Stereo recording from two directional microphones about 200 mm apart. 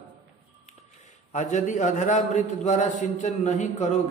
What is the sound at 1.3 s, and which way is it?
A man's voice, 40° left (ahead or behind).